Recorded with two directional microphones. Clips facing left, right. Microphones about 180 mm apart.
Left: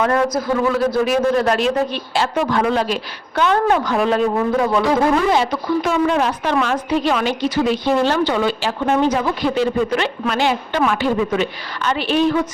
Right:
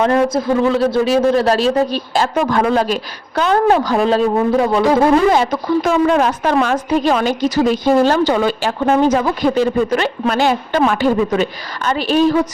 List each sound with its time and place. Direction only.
0.0 s speech: 25° right (ahead or behind)
5.3 s a woman's voice: 45° right (ahead or behind)